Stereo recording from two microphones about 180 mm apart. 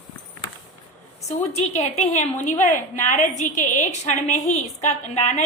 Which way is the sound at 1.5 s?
35° left (ahead or behind).